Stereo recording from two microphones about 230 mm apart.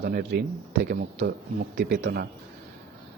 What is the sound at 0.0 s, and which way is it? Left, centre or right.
Speech, right.